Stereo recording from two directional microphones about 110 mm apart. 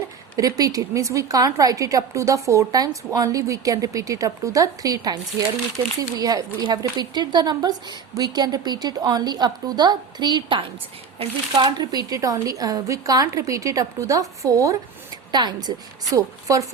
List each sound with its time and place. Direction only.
0.3 s speech: 35° right (ahead or behind)
15.3 s speech: 40° right (ahead or behind)